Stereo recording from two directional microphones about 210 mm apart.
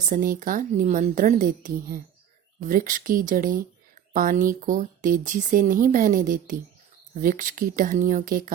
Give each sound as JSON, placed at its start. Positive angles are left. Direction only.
{"t": 0.1, "sound": "speech", "side_deg": -40}